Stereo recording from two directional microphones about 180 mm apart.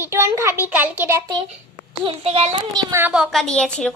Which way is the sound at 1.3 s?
30° right (ahead or behind).